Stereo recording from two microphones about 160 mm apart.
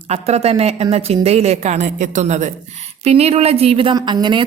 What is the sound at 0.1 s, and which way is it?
A woman's voice, 40° right (ahead or behind).